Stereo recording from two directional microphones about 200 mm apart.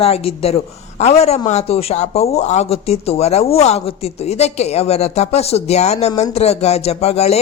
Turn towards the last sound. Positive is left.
turn(degrees=30)  # may be behind; listen again after turning